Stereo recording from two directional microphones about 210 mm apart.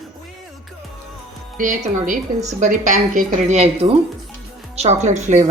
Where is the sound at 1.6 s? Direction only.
40° right (ahead or behind).